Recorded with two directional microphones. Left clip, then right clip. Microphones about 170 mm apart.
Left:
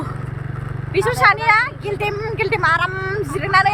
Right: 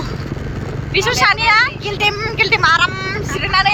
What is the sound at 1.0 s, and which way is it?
Speech, 10° left (ahead or behind).